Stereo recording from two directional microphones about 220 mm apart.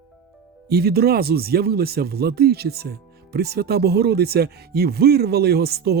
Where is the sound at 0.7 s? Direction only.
45° right (ahead or behind).